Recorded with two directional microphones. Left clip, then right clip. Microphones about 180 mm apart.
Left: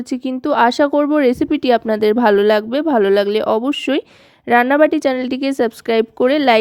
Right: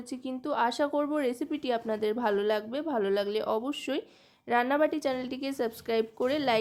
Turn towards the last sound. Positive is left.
turn(degrees=40)  # may be behind; listen again after turning